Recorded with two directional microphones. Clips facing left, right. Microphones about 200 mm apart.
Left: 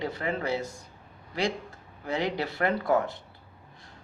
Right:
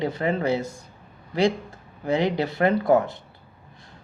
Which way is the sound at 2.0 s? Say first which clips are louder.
Right 6 dB; 20° right (ahead or behind).